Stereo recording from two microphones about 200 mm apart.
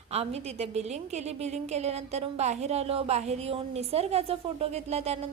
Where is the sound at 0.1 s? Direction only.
30° right (ahead or behind).